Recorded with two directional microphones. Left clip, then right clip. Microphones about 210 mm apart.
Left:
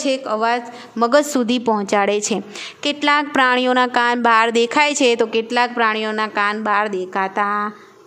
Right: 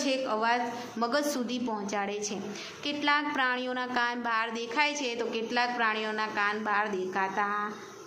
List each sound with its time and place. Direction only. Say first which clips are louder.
0.0 s a woman's voice: left 10 dB; 50° left (ahead or behind)